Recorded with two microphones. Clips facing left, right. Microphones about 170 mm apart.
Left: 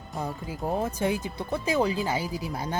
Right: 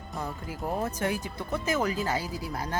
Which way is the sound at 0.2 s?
25° left (ahead or behind).